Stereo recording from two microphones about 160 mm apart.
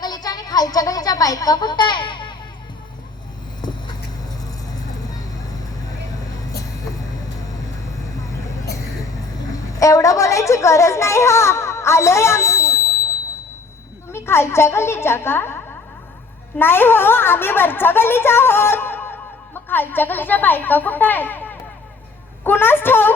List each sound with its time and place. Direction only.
0.0 s speech: 25° left (ahead or behind)
3.6 s vehicle: 25° left (ahead or behind)
9.5 s a sound: 20° left (ahead or behind)
14.1 s a woman's voice: 15° left (ahead or behind)